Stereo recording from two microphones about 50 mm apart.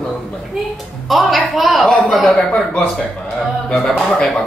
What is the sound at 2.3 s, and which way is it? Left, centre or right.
A man's voice, centre.